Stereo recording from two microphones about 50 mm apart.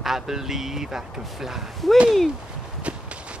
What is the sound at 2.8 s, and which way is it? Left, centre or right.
Walk, right.